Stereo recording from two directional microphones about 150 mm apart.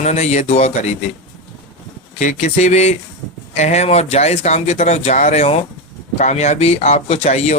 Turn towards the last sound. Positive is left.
turn(degrees=45)  # may be behind; listen again after turning